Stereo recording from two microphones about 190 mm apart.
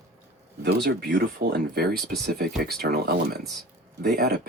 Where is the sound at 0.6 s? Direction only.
60° right (ahead or behind).